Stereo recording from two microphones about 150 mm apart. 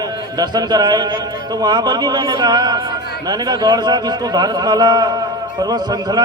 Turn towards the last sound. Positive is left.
turn(degrees=-30)  # may be behind; listen again after turning